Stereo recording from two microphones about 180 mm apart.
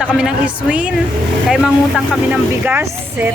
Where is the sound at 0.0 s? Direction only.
5° right (ahead or behind).